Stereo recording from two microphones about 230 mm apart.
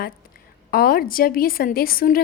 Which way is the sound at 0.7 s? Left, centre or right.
Left.